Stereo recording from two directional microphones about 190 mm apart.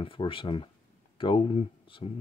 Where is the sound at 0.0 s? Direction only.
25° left (ahead or behind).